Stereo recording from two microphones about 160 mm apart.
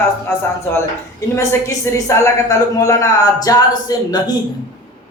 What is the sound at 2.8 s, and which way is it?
A man's voice, 20° left (ahead or behind).